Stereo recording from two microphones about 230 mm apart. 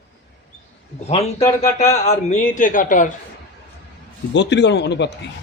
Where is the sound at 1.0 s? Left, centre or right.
Left.